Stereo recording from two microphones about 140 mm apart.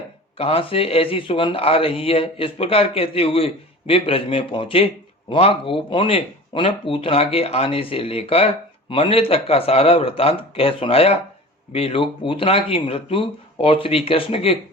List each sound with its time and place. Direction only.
0.3 s a man's voice: 40° left (ahead or behind)